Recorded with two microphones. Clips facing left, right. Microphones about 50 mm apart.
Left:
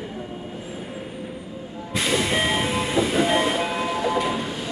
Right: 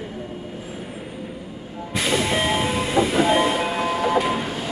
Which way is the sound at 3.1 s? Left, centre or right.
Centre.